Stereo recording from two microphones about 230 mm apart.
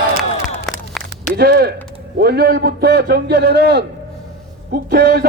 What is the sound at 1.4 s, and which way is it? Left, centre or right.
A man's voice, right.